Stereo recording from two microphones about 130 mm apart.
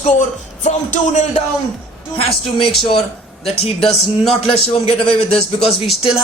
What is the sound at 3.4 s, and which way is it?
Speech, 50° left (ahead or behind).